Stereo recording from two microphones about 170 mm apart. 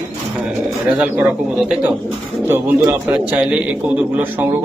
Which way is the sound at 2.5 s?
10° right (ahead or behind).